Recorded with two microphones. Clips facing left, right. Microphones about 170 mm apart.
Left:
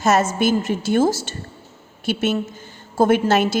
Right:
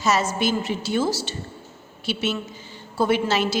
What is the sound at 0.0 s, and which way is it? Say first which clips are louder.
A woman's voice: left 4 dB; 50° left (ahead or behind).